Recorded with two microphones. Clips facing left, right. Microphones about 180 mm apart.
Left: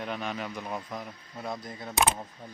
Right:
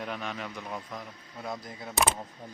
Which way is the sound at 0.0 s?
5° left (ahead or behind).